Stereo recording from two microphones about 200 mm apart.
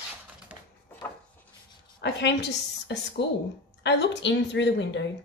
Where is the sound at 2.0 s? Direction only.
60° left (ahead or behind).